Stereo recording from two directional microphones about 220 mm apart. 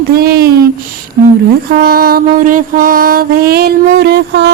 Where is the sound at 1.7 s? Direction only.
45° right (ahead or behind).